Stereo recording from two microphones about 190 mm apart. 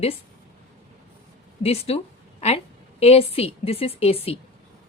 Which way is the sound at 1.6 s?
30° left (ahead or behind).